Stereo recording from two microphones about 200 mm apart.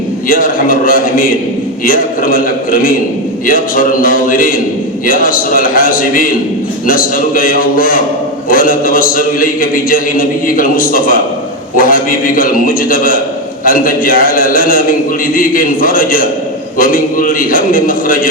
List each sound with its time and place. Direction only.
0.3 s a man's voice: 45° left (ahead or behind)
3.4 s a man's voice: 45° left (ahead or behind)